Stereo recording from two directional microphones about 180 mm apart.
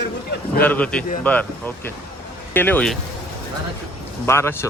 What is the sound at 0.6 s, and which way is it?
Speech, 10° left (ahead or behind).